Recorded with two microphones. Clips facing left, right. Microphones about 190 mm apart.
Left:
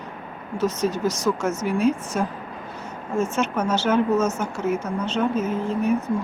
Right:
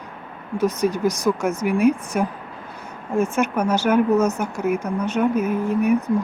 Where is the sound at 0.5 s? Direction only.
15° right (ahead or behind).